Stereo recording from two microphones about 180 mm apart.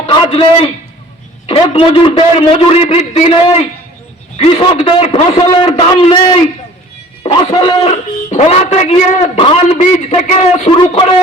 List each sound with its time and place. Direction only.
0.1 s a man's voice: 30° left (ahead or behind)
1.7 s speech: 30° left (ahead or behind)